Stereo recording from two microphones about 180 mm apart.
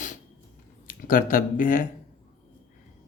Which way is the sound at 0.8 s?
50° left (ahead or behind).